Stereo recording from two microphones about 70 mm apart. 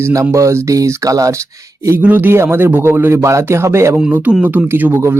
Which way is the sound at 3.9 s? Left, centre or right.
Centre.